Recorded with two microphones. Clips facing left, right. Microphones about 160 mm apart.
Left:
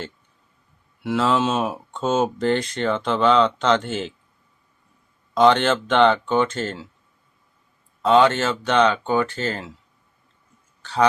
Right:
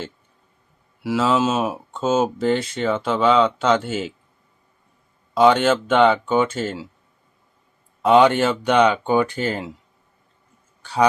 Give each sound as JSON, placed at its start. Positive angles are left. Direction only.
{"t": 1.0, "sound": "speech", "side_deg": -5}
{"t": 5.3, "sound": "speech", "side_deg": -5}
{"t": 8.0, "sound": "speech", "side_deg": -15}